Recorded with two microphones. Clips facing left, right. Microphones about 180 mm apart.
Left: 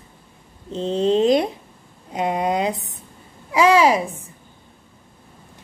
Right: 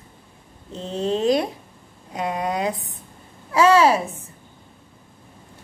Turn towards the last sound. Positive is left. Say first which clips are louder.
# even
turn(degrees=15)  # may be behind; listen again after turning